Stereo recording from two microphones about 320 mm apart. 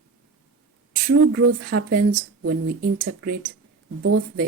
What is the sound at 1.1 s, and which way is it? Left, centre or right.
Speech, right.